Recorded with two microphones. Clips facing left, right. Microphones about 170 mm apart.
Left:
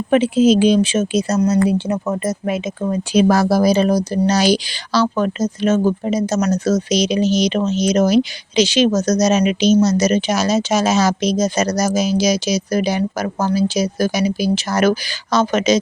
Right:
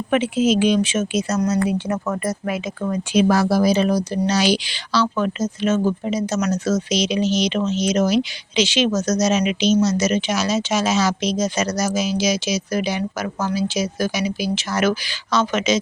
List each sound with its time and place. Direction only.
0.1 s speech: 35° left (ahead or behind)
1.9 s speech: 20° left (ahead or behind)
3.1 s speech: 40° left (ahead or behind)